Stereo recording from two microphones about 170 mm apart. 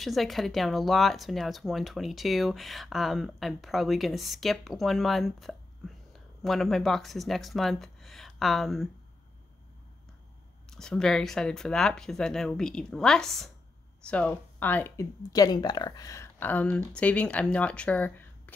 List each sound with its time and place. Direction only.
0.0 s speech: centre (ahead or behind)
10.7 s speech: 5° left (ahead or behind)
15.3 s speech: 25° left (ahead or behind)